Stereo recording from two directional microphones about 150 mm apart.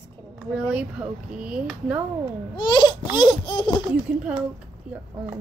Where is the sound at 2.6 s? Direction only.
30° left (ahead or behind).